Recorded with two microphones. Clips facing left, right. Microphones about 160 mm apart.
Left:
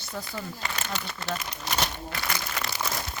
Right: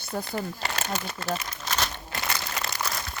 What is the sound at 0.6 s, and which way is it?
Crumpling, 40° right (ahead or behind).